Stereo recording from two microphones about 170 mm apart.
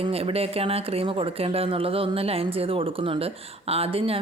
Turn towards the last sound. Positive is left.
turn(degrees=-35)  # may be behind; listen again after turning